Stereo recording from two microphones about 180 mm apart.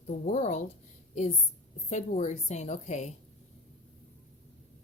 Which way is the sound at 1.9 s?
40° left (ahead or behind).